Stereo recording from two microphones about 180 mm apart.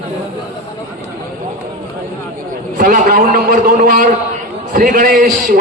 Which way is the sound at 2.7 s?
50° right (ahead or behind).